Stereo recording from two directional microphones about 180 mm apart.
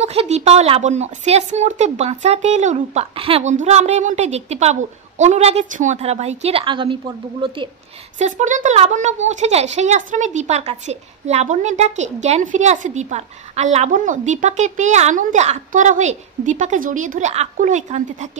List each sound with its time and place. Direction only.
0.0 s speech: 35° right (ahead or behind)
8.2 s speech: 40° right (ahead or behind)